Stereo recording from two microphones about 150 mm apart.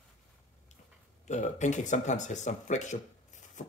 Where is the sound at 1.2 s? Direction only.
50° left (ahead or behind).